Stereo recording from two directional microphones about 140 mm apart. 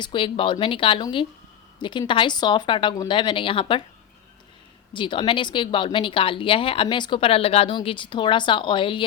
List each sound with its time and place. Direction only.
0.0 s speech: 35° left (ahead or behind)
4.9 s speech: 35° left (ahead or behind)